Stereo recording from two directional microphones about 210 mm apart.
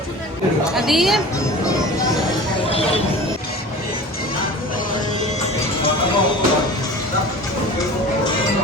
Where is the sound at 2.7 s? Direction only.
30° left (ahead or behind).